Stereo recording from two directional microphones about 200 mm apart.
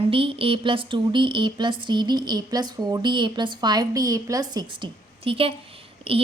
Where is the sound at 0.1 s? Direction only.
25° right (ahead or behind).